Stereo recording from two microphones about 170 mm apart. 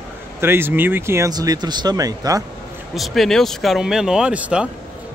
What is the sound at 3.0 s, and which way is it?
Speech, centre (ahead or behind).